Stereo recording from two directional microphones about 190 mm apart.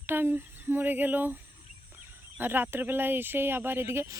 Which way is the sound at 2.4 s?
10° right (ahead or behind).